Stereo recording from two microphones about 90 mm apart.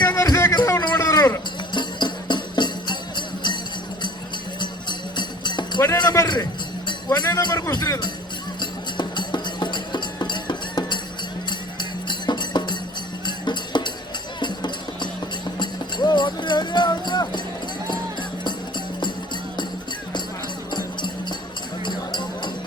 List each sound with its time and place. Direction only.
0.2 s music: 35° left (ahead or behind)
0.9 s a sound: 40° left (ahead or behind)
1.7 s music: 55° left (ahead or behind)
4.6 s music: 60° left (ahead or behind)
7.7 s speech: 50° left (ahead or behind)
9.0 s music: 55° left (ahead or behind)
20.7 s music: 55° left (ahead or behind)